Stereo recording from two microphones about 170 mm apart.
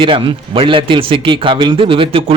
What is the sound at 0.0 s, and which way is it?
Speech, 30° right (ahead or behind).